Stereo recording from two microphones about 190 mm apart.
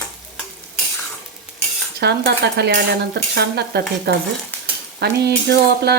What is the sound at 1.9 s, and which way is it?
Speech, 60° right (ahead or behind).